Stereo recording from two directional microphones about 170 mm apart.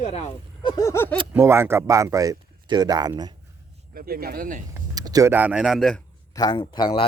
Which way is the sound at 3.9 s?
60° right (ahead or behind).